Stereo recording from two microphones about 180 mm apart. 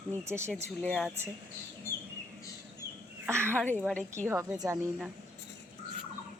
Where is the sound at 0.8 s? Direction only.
5° left (ahead or behind).